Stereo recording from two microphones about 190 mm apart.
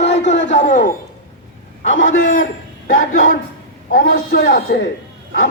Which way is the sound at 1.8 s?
85° left.